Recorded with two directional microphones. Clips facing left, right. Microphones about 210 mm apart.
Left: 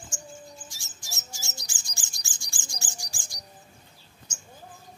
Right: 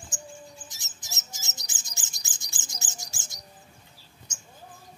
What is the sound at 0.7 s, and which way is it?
Bird, 20° right (ahead or behind).